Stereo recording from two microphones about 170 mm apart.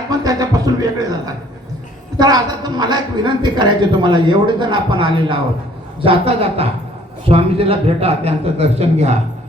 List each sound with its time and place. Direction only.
0.1 s a man's voice: 20° right (ahead or behind); by 9.1 s 40° right (ahead or behind)